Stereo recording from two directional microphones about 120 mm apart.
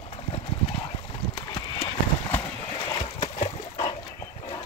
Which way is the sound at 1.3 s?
40° left (ahead or behind).